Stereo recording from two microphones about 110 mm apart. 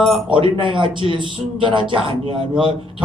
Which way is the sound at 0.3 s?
50° right (ahead or behind).